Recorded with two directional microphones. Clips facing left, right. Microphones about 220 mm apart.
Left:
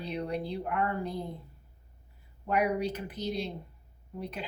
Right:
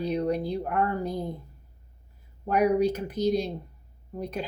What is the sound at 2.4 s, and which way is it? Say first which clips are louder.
A woman's voice: right 6 dB; 40° right (ahead or behind).